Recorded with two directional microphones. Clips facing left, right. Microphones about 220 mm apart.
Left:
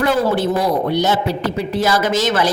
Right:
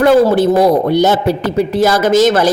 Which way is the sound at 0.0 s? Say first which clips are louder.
Right 8 dB; 45° right (ahead or behind).